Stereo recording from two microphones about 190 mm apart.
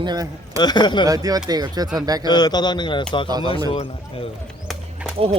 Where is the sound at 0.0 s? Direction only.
20° right (ahead or behind).